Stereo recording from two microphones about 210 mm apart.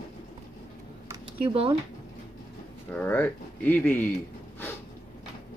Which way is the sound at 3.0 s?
10° left (ahead or behind).